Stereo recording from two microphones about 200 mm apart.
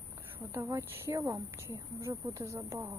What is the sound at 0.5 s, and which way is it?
Speech, 15° right (ahead or behind).